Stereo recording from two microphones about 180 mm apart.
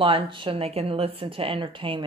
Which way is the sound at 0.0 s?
30° right (ahead or behind).